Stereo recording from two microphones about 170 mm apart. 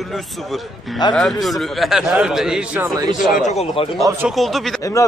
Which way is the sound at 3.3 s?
45° left (ahead or behind).